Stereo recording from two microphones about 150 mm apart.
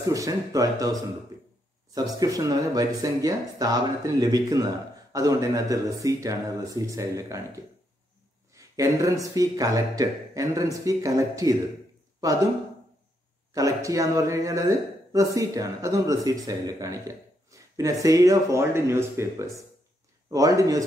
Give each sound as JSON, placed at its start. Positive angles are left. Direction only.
{"t": 0.0, "sound": "speech", "side_deg": -20}
{"t": 13.5, "sound": "speech", "side_deg": -20}